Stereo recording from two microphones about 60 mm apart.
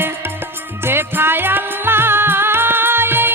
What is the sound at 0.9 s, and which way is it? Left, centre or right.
Music, right.